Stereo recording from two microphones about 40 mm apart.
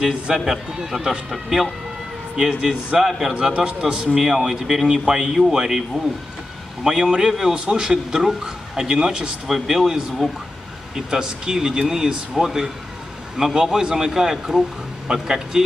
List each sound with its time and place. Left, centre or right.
0.3 s a man's voice: centre
2.3 s a man's voice: right
3.0 s a man's voice: centre
3.3 s a man's voice: right